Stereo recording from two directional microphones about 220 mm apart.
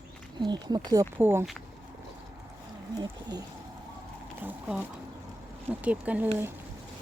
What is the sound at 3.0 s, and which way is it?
Speech, 15° right (ahead or behind).